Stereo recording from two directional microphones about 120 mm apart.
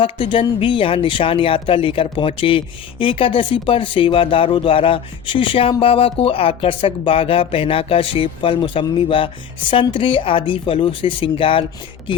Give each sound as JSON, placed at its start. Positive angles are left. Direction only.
{"t": 0.0, "sound": "speech", "side_deg": 45}